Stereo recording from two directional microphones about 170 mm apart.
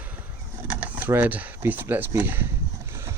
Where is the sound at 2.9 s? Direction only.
15° right (ahead or behind).